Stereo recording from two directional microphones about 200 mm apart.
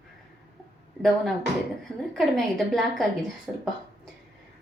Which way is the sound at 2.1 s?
Centre (ahead or behind).